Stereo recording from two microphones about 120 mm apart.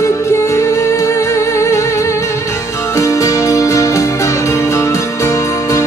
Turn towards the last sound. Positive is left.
turn(degrees=25)  # may be behind; listen again after turning